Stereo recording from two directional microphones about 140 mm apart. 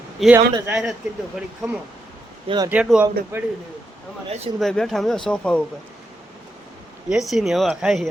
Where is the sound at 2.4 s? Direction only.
30° right (ahead or behind).